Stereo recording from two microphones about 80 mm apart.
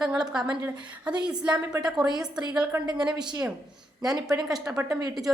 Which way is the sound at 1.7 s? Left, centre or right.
Right.